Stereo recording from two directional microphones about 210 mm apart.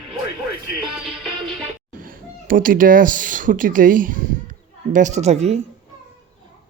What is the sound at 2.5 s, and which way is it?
Speech, 40° right (ahead or behind).